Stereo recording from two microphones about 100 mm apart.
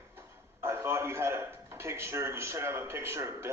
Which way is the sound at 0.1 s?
25° right (ahead or behind).